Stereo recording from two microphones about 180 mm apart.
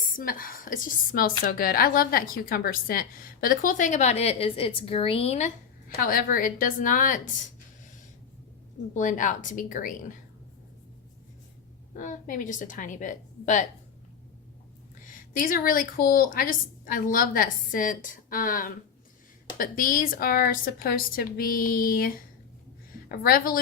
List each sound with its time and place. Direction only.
0.0 s a woman's voice: 50° left (ahead or behind)
6.0 s a woman's voice: 50° left (ahead or behind)
9.0 s a woman's voice: 45° left (ahead or behind)
11.9 s a woman's voice: 45° left (ahead or behind)
15.0 s a woman's voice: 50° left (ahead or behind)